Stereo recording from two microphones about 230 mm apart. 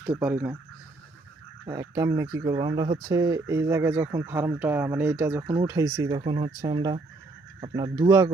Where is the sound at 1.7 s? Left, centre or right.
Centre.